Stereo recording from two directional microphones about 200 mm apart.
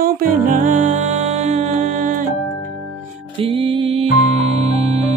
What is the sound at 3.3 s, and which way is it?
Music, 25° right (ahead or behind).